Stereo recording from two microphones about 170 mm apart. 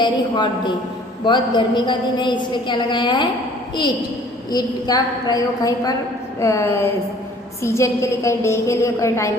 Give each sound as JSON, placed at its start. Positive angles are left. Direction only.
{"t": 0.0, "sound": "a woman's voice", "side_deg": 25}
{"t": 4.5, "sound": "a woman's voice", "side_deg": 20}